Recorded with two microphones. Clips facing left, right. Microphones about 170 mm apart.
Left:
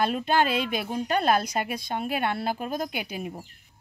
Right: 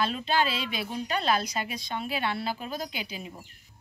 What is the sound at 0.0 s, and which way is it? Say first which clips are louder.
Speech: left 3 dB; 55° left (ahead or behind).